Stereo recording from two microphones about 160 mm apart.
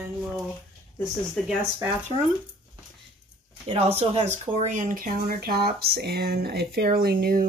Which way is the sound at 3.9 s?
40° right (ahead or behind).